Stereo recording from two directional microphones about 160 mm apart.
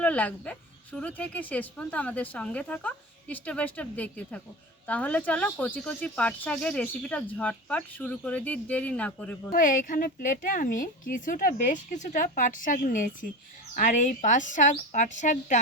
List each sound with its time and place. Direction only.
0.0 s speech: 10° left (ahead or behind)
9.5 s a woman's voice: 60° left (ahead or behind)